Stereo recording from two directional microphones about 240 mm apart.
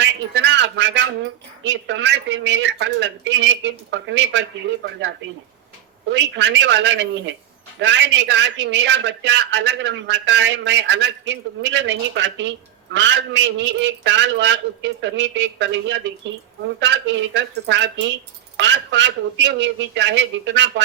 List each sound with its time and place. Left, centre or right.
0.0 s a man's voice: right
6.1 s a man's voice: right